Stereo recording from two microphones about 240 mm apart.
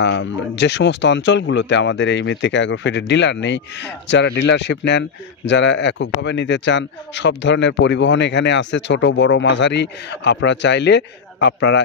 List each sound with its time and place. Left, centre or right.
0.0 s speech: left